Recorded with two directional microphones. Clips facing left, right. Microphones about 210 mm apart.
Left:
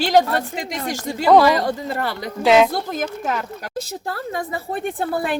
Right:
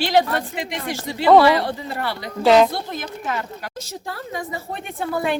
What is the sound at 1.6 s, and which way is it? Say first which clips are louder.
Speech: left 3 dB; 45° left (ahead or behind).